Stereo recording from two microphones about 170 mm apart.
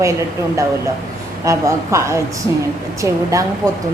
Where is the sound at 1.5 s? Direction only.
15° right (ahead or behind).